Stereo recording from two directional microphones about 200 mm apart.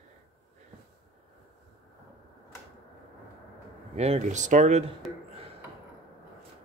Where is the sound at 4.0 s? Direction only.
35° right (ahead or behind).